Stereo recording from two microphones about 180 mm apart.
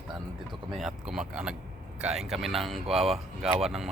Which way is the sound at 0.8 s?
Centre (ahead or behind).